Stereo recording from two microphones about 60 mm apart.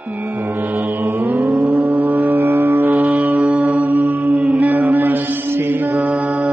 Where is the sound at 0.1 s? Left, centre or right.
Right.